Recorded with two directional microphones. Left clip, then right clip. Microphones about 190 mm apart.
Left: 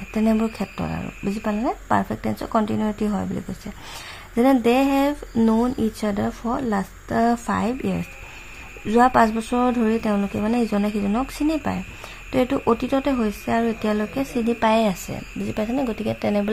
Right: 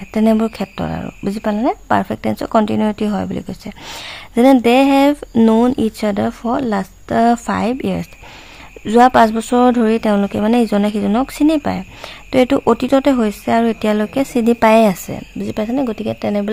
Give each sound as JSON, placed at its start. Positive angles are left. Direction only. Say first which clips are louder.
{"t": 0.1, "sound": "speech", "louder": "right 7 dB", "side_deg": -30}